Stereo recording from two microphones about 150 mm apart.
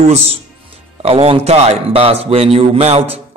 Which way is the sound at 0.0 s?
45° right (ahead or behind).